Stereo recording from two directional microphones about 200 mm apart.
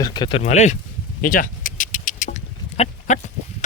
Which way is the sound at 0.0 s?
20° left (ahead or behind).